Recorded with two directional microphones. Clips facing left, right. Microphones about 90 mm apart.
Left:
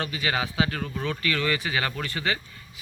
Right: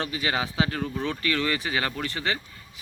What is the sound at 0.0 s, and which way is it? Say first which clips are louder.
A man's voice: even; 30° right (ahead or behind).